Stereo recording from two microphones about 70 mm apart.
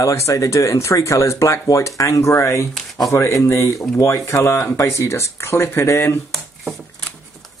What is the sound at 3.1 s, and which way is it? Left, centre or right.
Speech, left.